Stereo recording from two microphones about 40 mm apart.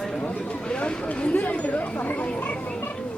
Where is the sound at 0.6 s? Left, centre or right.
Left.